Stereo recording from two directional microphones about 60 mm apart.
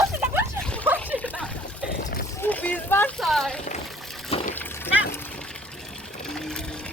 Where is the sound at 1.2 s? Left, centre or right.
Left.